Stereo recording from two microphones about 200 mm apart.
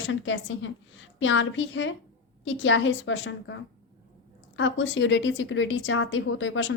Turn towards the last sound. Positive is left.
turn(degrees=70)  # may be behind; listen again after turning